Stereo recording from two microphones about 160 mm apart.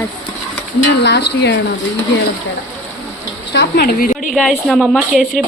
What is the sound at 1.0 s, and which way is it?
Speech, 90° left.